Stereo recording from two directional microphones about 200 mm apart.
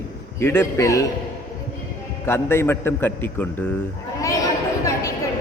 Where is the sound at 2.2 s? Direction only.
10° left (ahead or behind).